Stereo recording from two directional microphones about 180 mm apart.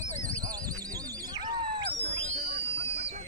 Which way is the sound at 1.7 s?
35° right (ahead or behind).